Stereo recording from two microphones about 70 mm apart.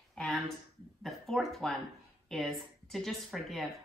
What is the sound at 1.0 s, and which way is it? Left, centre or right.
A woman's voice, centre.